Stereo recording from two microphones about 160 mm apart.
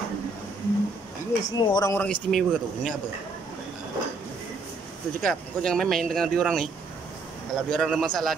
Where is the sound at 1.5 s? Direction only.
25° left (ahead or behind).